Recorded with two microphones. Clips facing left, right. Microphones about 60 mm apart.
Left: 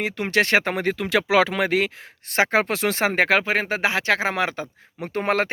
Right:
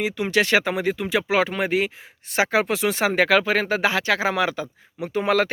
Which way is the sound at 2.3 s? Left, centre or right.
Left.